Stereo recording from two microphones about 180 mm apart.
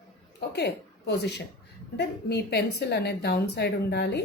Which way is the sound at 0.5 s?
70° left (ahead or behind).